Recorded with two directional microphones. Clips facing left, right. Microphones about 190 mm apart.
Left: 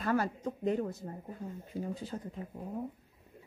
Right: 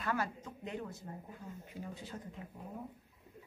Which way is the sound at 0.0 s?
40° left (ahead or behind).